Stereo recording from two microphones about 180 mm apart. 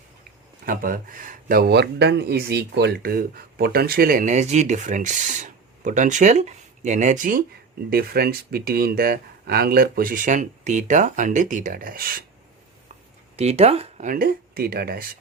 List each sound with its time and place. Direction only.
0.6 s speech: 50° right (ahead or behind)
13.3 s speech: 35° right (ahead or behind)
14.1 s speech: 55° right (ahead or behind)